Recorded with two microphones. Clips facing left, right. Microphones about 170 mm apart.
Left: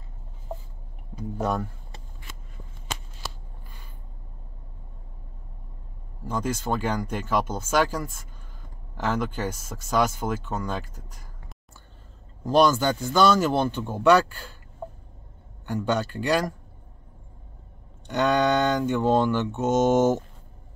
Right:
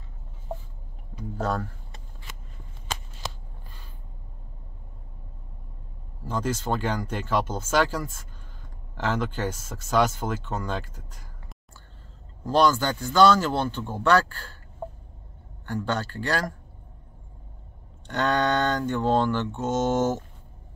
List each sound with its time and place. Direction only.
1.4 s speech: 15° left (ahead or behind)
6.2 s speech: 10° left (ahead or behind)
12.4 s speech: 15° left (ahead or behind)
15.6 s speech: 15° left (ahead or behind)
18.0 s speech: 10° left (ahead or behind)